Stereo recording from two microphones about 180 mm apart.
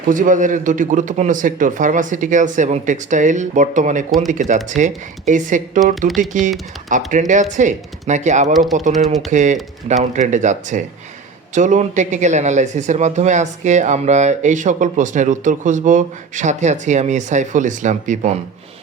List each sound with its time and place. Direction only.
0.1 s speech: 45° right (ahead or behind)